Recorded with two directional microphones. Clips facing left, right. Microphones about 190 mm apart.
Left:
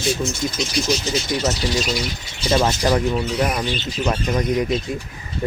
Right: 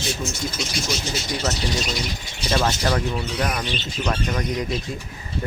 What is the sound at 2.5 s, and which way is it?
Speech, 20° left (ahead or behind).